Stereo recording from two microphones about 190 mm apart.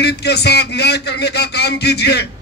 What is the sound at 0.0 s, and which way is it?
Speech, 60° left (ahead or behind).